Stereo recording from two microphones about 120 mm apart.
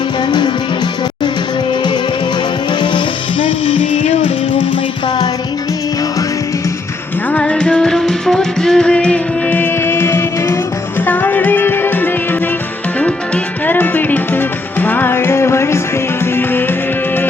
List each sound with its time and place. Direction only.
0.3 s music: 35° left (ahead or behind)
3.4 s music: 45° left (ahead or behind)
7.3 s music: 10° left (ahead or behind)